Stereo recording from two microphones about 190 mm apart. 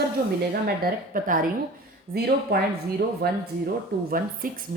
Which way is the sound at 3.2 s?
55° right (ahead or behind).